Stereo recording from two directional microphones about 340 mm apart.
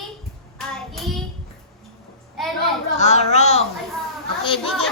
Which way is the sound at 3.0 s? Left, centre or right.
Centre.